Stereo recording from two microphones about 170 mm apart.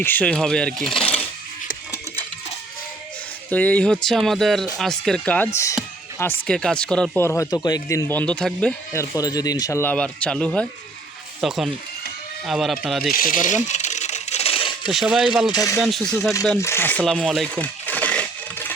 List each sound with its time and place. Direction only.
0.0 s speech: 10° left (ahead or behind)
3.5 s speech: 10° left (ahead or behind)
6.5 s speech: 5° left (ahead or behind)
7.3 s speech: 20° left (ahead or behind)
8.9 s speech: 20° left (ahead or behind); by 13.1 s centre (ahead or behind)
13.1 s speech: 55° left (ahead or behind)
13.7 s coin: 45° left (ahead or behind)
14.8 s speech: 5° right (ahead or behind)
15.5 s speech: 20° left (ahead or behind)
17.0 s coin: centre (ahead or behind)